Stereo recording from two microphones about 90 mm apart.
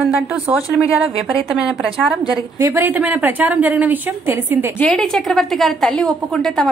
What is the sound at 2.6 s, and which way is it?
A woman's voice, 25° right (ahead or behind).